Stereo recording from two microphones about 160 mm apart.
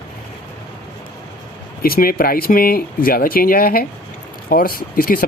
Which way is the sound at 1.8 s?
65° left (ahead or behind).